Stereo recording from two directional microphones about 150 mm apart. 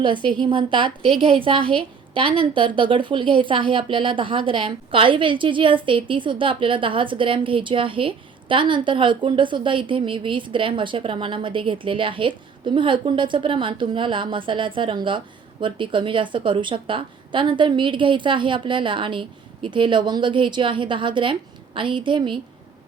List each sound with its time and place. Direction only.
0.0 s speech: 30° right (ahead or behind)